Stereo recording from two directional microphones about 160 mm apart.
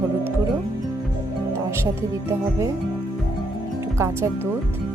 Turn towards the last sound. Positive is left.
turn(degrees=-15)  # may be behind; listen again after turning